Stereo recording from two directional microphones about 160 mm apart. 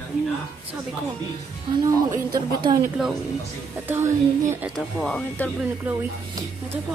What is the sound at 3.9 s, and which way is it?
Speech, 15° right (ahead or behind).